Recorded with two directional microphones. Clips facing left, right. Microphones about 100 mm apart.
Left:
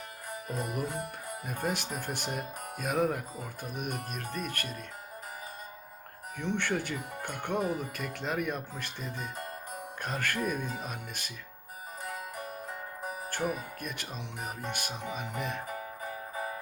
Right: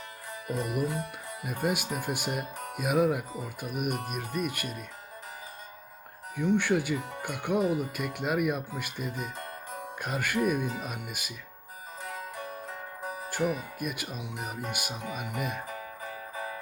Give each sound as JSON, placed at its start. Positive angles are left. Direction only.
{"t": 0.4, "sound": "music", "side_deg": 40}
{"t": 1.5, "sound": "speech", "side_deg": -10}
{"t": 6.3, "sound": "speech", "side_deg": -10}
{"t": 13.7, "sound": "speech", "side_deg": -10}
{"t": 16.0, "sound": "music", "side_deg": 40}